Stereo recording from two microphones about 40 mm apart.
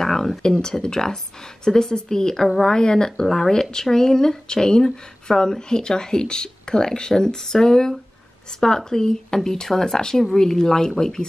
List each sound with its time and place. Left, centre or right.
0.0 s speech: centre
2.8 s speech: centre